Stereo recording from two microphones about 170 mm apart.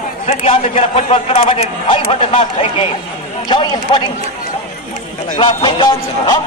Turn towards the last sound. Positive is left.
turn(degrees=25)  # may be behind; listen again after turning